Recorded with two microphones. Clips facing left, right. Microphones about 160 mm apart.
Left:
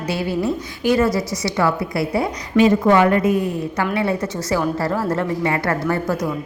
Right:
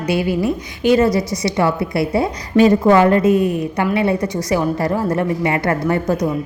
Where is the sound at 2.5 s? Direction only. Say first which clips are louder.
Right 2 dB; 35° right (ahead or behind).